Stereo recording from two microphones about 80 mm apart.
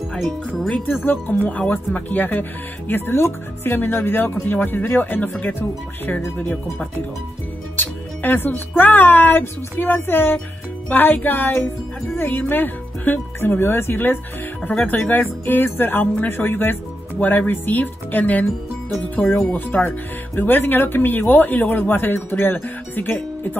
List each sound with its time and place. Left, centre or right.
0.7 s speech: centre
1.0 s speech: left